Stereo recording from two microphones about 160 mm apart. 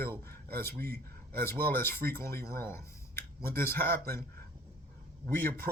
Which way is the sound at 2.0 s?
70° right (ahead or behind).